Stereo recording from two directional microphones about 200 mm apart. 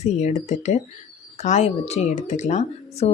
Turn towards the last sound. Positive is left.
turn(degrees=35)  # may be behind; listen again after turning